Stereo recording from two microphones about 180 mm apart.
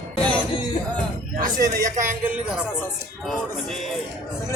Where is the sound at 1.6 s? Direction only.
15° right (ahead or behind); by 3.7 s centre (ahead or behind).